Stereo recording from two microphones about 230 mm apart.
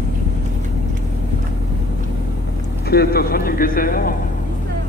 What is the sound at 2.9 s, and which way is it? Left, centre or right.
Speech, left.